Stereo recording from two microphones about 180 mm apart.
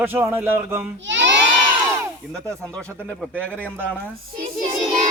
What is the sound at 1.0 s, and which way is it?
Crowd, 90° right.